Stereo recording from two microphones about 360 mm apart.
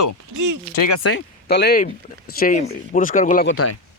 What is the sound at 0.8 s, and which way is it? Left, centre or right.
Speech, left.